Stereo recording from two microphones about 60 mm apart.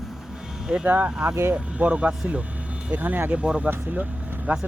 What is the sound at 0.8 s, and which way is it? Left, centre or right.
Speech, right.